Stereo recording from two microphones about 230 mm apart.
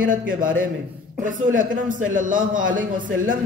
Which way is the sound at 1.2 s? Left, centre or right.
Right.